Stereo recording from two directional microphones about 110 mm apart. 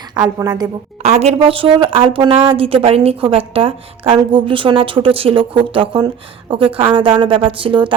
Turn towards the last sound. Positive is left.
turn(degrees=-50)  # may be behind; listen again after turning